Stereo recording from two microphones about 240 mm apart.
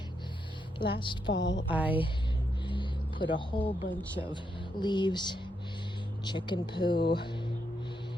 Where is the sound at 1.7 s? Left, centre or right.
Centre.